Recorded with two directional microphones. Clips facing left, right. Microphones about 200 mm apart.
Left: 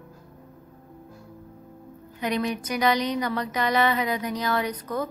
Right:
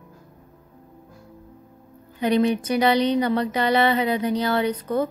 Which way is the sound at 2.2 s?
30° right (ahead or behind).